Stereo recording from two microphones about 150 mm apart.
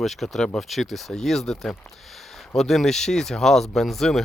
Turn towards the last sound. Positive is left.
turn(degrees=0)  # may be behind; listen again after turning